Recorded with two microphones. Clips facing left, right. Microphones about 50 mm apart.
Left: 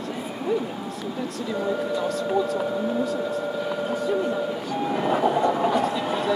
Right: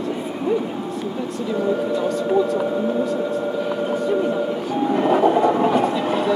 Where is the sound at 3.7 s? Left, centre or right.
Centre.